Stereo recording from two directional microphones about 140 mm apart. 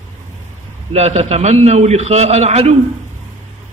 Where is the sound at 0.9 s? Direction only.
50° right (ahead or behind).